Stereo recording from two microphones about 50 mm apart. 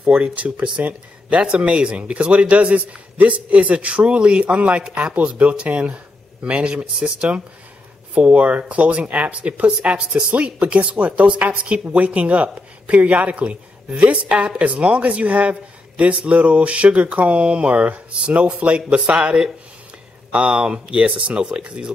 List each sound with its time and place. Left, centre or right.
0.1 s speech: right